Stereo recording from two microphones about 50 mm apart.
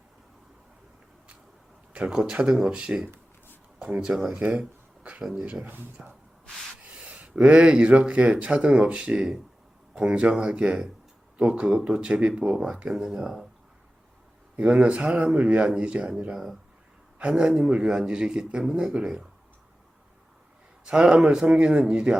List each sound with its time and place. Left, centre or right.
2.0 s speech: centre
3.8 s a sound: right
4.0 s speech: centre
4.4 s speech: centre
6.8 s speech: right; by 13.5 s centre
14.5 s speech: right
16.3 s speech: centre
17.2 s speech: centre
20.8 s speech: centre